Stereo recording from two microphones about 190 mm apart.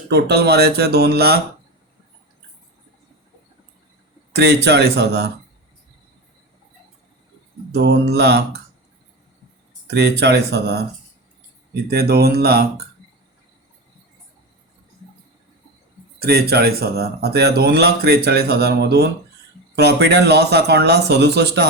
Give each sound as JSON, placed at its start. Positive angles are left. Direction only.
{"t": 0.1, "sound": "speech", "side_deg": -60}
{"t": 4.3, "sound": "speech", "side_deg": -60}
{"t": 7.7, "sound": "speech", "side_deg": -60}
{"t": 9.8, "sound": "speech", "side_deg": -60}
{"t": 16.2, "sound": "speech", "side_deg": -55}